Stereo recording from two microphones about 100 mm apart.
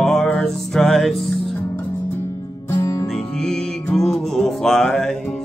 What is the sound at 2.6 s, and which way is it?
Music, 25° left (ahead or behind).